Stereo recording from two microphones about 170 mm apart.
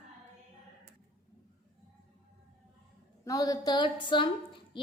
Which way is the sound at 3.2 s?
20° left (ahead or behind).